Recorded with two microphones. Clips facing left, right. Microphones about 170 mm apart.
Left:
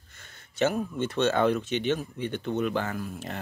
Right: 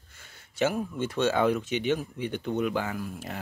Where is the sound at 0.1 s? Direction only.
10° right (ahead or behind).